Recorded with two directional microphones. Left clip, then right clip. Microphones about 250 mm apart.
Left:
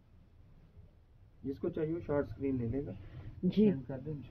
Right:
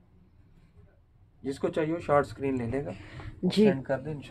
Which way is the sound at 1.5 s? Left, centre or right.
Right.